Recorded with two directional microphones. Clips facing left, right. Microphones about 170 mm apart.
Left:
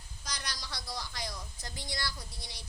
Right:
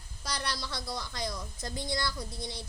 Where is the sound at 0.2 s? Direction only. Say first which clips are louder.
Right 7 dB; 60° right (ahead or behind).